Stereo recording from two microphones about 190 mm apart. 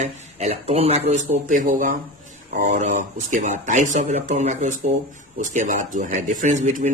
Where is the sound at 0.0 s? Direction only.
35° right (ahead or behind).